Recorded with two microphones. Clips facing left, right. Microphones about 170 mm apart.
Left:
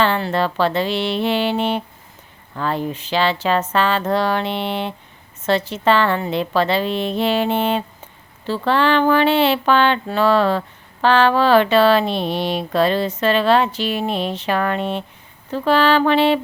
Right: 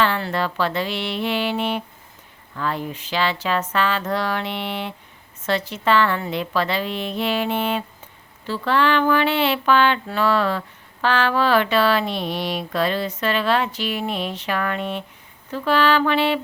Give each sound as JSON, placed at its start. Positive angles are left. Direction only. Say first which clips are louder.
{"t": 0.0, "sound": "speech", "louder": "left 3 dB", "side_deg": 30}